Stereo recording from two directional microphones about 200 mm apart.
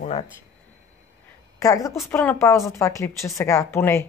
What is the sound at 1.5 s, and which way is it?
A woman's voice, 15° left (ahead or behind).